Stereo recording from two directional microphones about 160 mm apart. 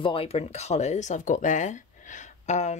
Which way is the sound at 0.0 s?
35° left (ahead or behind).